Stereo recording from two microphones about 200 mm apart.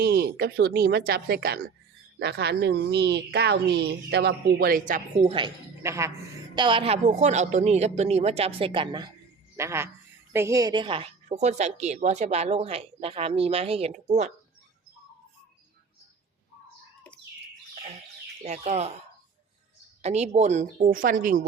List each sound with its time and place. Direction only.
0.0 s a woman's voice: 50° right (ahead or behind)
5.2 s a woman's voice: 25° right (ahead or behind)
5.8 s speech: 15° right (ahead or behind)
6.6 s speech: 25° right (ahead or behind)
9.6 s a woman's voice: 15° right (ahead or behind); by 14.3 s 35° right (ahead or behind)
18.4 s speech: 35° right (ahead or behind)
20.0 s speech: 35° right (ahead or behind)